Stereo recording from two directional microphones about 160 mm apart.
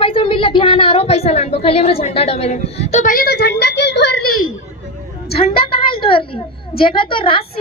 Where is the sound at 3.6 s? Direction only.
90° left.